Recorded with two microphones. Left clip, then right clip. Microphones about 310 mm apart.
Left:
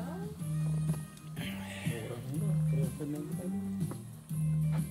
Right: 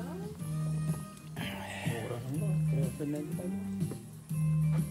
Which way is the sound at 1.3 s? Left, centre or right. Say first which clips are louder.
Right 3 dB; right.